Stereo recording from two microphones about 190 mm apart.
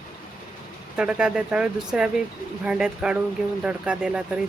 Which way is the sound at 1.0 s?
5° right (ahead or behind).